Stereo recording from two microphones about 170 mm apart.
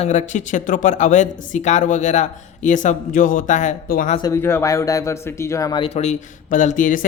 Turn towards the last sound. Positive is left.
turn(degrees=50)  # may be behind; listen again after turning